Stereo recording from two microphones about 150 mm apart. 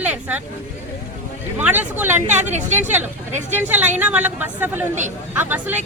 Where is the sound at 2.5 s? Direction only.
50° right (ahead or behind).